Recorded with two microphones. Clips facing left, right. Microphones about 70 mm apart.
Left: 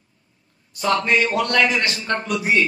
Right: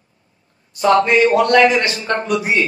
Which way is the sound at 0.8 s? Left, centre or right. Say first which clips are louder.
Right 7 dB; centre.